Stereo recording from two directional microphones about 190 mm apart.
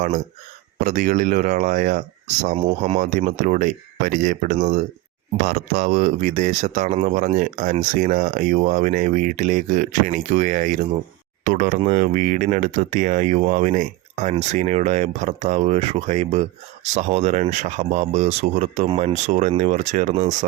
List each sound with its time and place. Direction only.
0.9 s speech: 45° right (ahead or behind)